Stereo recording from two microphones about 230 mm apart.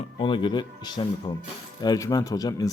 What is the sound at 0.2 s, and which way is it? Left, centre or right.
Speech, left.